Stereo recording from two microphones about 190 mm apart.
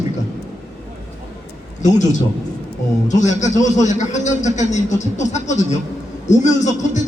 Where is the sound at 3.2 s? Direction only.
40° left (ahead or behind).